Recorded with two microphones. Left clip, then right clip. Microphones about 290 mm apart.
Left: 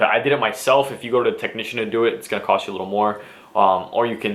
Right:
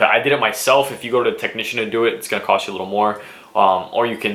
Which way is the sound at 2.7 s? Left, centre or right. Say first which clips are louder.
Right 2 dB; left.